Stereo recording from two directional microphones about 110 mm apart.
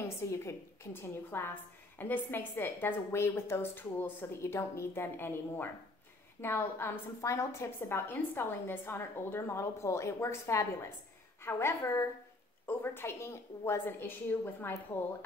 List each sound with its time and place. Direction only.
0.3 s a woman's voice: 25° left (ahead or behind)